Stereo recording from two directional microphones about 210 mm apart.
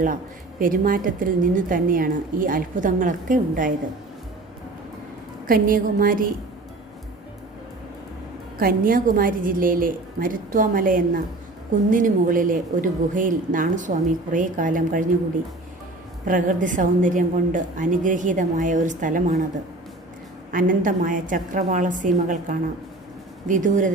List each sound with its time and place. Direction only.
0.6 s a woman's voice: 40° right (ahead or behind)
5.5 s a woman's voice: 40° right (ahead or behind)
8.5 s a woman's voice: 45° right (ahead or behind)
16.2 s a woman's voice: 40° right (ahead or behind)
20.5 s a woman's voice: 40° right (ahead or behind)